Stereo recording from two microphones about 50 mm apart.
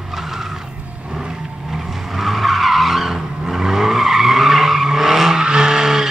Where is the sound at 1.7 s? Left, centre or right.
Centre.